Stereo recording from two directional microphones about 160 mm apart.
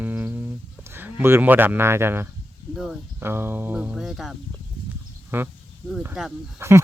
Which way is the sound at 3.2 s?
15° right (ahead or behind).